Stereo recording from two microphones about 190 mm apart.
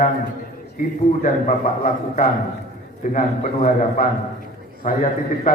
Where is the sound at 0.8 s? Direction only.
45° left (ahead or behind).